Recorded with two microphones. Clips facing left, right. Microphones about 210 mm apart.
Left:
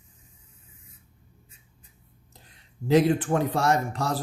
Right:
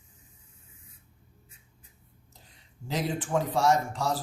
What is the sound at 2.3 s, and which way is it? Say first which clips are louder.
Speech: left 3 dB; 60° left (ahead or behind).